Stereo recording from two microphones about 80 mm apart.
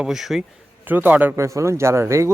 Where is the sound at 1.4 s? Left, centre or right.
Right.